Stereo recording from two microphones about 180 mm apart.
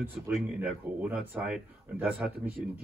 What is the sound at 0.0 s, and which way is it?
Speech, 10° right (ahead or behind).